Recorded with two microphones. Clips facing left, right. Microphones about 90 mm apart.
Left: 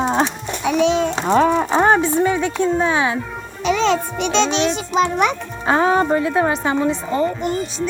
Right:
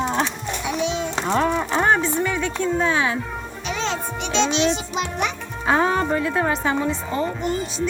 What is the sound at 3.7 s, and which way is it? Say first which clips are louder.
Speech: left 9 dB; 85° left.